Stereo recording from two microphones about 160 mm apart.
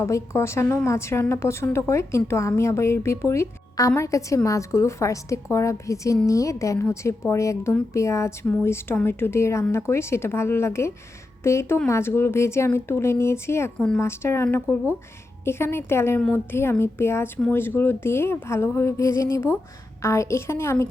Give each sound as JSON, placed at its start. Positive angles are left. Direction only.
{"t": 0.0, "sound": "a woman's voice", "side_deg": 15}